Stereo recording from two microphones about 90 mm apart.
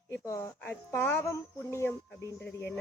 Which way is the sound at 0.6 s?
25° left (ahead or behind).